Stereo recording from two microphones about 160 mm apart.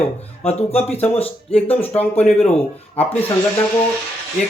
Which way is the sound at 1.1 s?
35° left (ahead or behind).